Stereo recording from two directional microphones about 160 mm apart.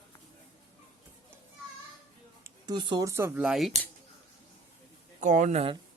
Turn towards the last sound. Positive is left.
turn(degrees=-50)  # may be behind; listen again after turning